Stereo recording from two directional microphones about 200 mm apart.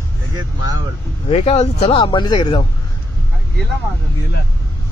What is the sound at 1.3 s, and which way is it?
Speech, 30° left (ahead or behind).